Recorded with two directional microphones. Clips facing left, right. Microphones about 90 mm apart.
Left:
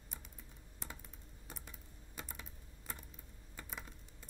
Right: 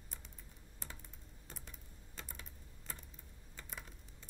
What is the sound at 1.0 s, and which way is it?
Typing, 5° left (ahead or behind).